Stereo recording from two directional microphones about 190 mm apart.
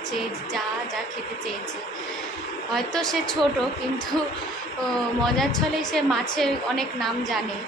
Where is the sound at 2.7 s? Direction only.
Centre (ahead or behind).